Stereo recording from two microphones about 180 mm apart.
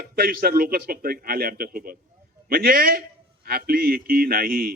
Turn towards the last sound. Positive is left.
turn(degrees=-55)  # may be behind; listen again after turning